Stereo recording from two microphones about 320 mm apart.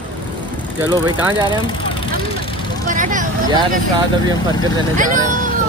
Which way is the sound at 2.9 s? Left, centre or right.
Right.